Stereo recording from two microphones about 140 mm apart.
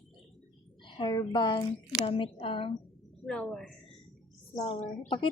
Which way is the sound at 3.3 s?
5° left (ahead or behind).